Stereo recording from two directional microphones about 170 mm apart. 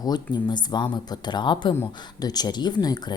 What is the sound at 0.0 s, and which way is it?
A woman's voice, 25° left (ahead or behind).